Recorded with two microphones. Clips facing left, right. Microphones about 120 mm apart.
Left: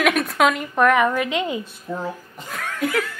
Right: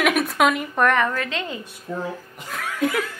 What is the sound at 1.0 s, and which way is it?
Speech, 15° left (ahead or behind).